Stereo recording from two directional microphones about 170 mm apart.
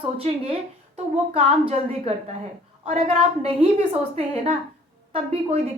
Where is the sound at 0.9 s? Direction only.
35° right (ahead or behind).